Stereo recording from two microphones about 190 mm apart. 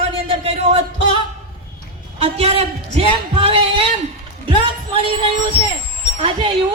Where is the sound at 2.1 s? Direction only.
30° right (ahead or behind).